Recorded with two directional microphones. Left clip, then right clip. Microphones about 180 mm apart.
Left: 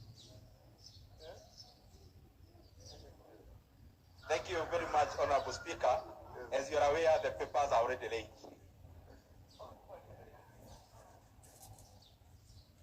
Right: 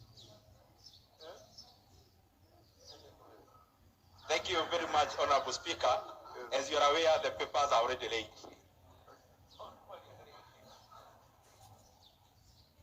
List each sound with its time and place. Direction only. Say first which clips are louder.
4.3 s a man's voice: right 3 dB; 30° right (ahead or behind)